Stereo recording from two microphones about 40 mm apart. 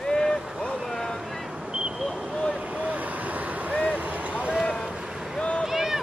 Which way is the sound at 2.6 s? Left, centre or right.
Right.